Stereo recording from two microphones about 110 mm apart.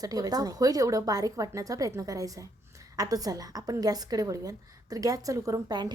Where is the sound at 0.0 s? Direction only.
35° right (ahead or behind).